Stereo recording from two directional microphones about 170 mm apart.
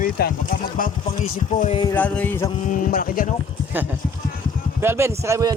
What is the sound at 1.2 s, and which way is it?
Speech, 40° left (ahead or behind).